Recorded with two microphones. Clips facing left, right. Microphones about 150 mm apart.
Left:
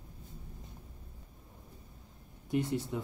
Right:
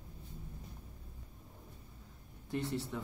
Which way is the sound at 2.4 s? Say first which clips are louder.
Left 5 dB; 15° left (ahead or behind).